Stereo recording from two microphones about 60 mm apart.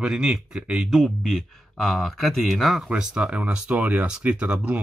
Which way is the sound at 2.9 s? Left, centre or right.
Centre.